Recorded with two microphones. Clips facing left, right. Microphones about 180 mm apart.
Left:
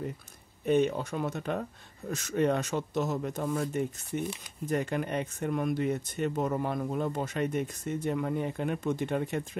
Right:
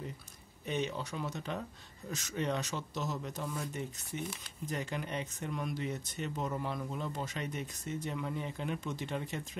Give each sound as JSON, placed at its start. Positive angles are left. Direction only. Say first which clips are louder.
{"t": 0.7, "sound": "speech", "louder": "left 10 dB", "side_deg": 50}